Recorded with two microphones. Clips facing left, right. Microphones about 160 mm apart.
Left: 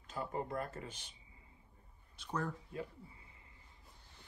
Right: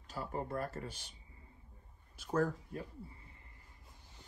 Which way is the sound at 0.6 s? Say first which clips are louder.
Right 2 dB; 35° right (ahead or behind).